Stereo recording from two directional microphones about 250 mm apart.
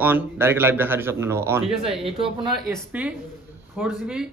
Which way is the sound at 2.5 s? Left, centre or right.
Centre.